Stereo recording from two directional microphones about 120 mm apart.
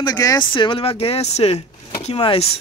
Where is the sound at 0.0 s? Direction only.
30° left (ahead or behind).